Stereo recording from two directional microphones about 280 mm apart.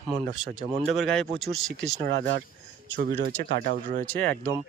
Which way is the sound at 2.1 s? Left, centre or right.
Right.